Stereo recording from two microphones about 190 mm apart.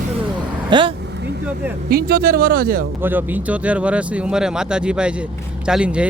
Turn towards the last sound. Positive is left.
turn(degrees=-5)  # may be behind; listen again after turning